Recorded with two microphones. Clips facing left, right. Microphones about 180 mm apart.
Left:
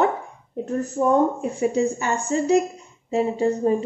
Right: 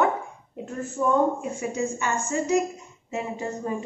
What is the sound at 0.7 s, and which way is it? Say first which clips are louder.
A woman's voice: left 4 dB; 40° left (ahead or behind).